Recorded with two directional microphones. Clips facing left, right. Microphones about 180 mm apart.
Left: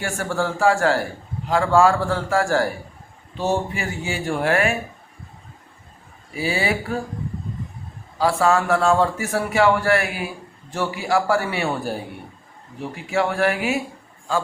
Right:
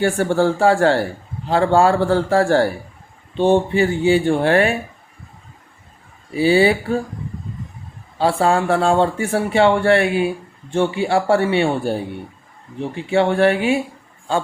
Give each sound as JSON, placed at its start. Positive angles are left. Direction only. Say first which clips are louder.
{"t": 0.0, "sound": "speech", "louder": "right 8 dB", "side_deg": -30}
{"t": 6.3, "sound": "a man's voice", "louder": "right 9 dB", "side_deg": -30}
{"t": 8.2, "sound": "a man's voice", "louder": "right 2 dB", "side_deg": -30}